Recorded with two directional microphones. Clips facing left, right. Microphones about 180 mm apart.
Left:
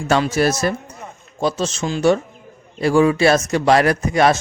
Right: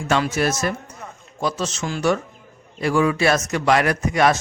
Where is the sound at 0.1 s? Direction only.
35° left (ahead or behind).